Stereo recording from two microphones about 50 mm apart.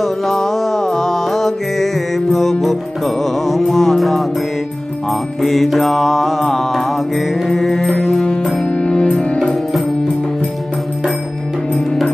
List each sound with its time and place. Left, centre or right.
0.0 s music: centre
5.4 s mantra: centre
8.6 s music: left